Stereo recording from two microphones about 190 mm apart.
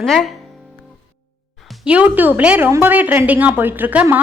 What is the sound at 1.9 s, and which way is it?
A woman's voice, 10° right (ahead or behind).